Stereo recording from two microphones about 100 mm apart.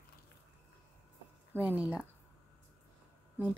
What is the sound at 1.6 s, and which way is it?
Speech, 15° right (ahead or behind).